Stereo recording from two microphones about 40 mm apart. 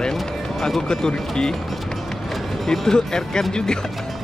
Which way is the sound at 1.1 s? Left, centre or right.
Centre.